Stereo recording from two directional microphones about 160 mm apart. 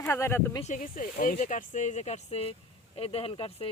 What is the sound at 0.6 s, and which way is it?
Speech, 55° left (ahead or behind).